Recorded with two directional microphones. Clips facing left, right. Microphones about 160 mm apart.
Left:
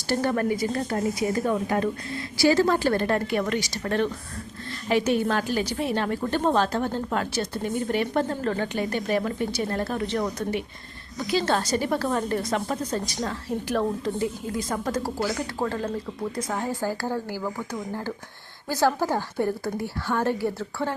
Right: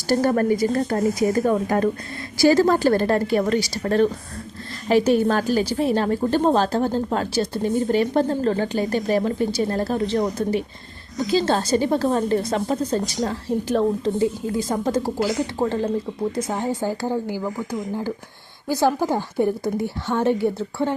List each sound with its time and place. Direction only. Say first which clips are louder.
0.1 s a woman's voice: right 5 dB; 40° right (ahead or behind); by 17.4 s 20° right (ahead or behind)
17.4 s a woman's voice: right 4 dB; 5° right (ahead or behind)